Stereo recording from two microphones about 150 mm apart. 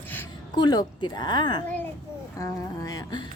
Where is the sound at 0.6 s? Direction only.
30° left (ahead or behind).